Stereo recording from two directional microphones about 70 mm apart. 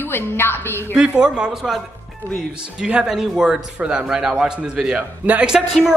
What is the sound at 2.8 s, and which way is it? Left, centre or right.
A man's voice, centre.